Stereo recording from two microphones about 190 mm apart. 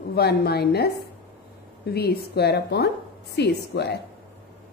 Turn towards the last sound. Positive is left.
turn(degrees=60)  # may be behind; listen again after turning